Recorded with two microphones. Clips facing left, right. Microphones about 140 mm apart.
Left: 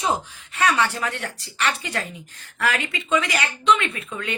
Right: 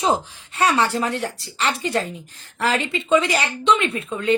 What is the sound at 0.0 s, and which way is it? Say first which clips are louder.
Speech: right 4 dB; 25° right (ahead or behind).